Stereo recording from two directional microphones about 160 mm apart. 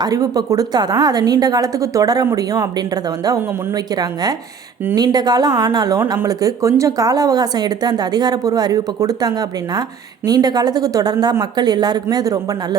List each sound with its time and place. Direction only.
0.0 s a woman's voice: 25° right (ahead or behind)